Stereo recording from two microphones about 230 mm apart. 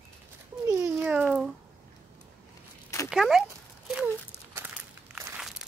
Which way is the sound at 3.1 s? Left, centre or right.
Centre.